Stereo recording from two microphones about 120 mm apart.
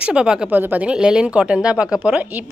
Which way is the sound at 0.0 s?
5° right (ahead or behind).